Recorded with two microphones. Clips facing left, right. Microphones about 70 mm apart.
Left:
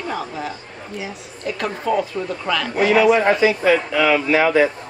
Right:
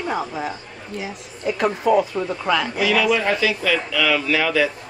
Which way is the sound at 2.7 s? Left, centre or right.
Left.